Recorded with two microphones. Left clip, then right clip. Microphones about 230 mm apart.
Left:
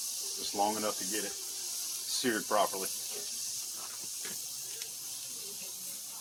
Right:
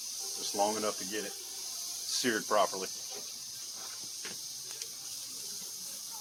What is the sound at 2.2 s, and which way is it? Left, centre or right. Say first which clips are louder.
Speech: right 1 dB; centre.